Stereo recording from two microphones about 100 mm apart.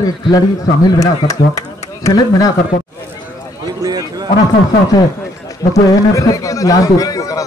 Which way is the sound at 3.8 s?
40° right (ahead or behind).